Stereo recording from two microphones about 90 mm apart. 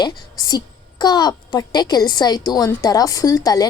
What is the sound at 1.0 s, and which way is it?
A woman's voice, 50° left (ahead or behind).